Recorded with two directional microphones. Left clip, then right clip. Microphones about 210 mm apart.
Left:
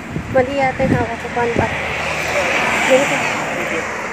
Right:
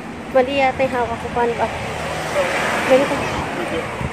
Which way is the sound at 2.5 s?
50° left (ahead or behind).